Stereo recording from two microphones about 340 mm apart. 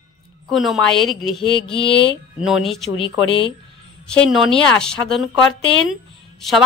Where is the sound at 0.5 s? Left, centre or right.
Centre.